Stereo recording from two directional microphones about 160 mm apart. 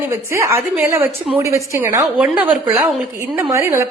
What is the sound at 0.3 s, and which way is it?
A woman's voice, 15° right (ahead or behind).